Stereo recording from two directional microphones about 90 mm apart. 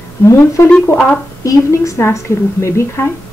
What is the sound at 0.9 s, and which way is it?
Speech, 15° left (ahead or behind).